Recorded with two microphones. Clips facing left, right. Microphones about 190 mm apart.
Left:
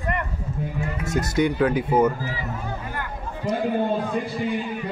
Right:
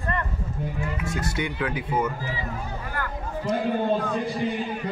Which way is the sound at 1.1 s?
40° left (ahead or behind).